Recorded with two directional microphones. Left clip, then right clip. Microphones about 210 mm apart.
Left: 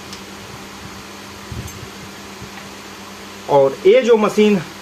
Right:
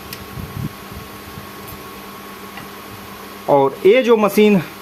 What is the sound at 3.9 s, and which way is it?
Speech, 55° right (ahead or behind).